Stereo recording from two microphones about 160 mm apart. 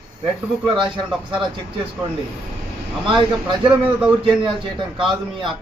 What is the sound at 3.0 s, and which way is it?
Speech, 30° right (ahead or behind).